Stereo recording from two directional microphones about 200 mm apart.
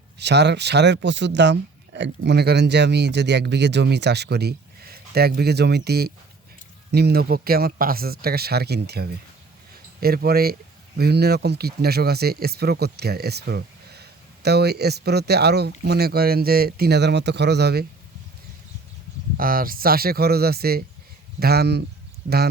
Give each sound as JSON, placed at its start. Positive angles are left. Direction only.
{"t": 0.2, "sound": "speech", "side_deg": -55}
{"t": 19.4, "sound": "speech", "side_deg": -45}
{"t": 22.3, "sound": "speech", "side_deg": -35}